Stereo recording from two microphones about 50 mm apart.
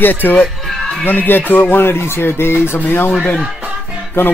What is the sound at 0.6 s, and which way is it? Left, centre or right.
Music, centre.